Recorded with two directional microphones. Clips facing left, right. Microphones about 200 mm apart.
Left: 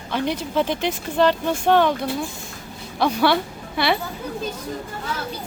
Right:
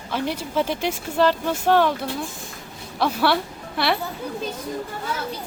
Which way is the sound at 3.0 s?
5° right (ahead or behind).